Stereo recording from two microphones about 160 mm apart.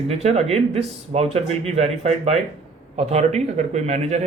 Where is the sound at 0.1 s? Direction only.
45° right (ahead or behind).